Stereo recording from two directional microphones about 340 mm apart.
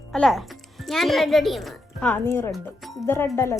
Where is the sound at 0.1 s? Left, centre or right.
Centre.